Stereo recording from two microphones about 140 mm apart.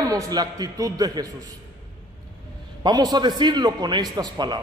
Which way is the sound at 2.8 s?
30° right (ahead or behind).